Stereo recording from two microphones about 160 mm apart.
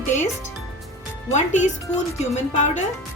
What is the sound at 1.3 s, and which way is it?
A woman's voice, 50° left (ahead or behind).